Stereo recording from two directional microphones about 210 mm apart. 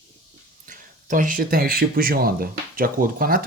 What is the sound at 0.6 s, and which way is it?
Speech, 40° right (ahead or behind).